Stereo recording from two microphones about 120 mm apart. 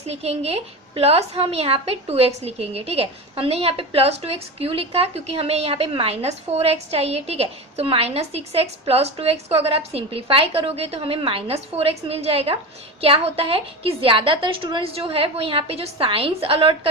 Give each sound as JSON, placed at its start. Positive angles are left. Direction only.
{"t": 0.1, "sound": "a woman's voice", "side_deg": -60}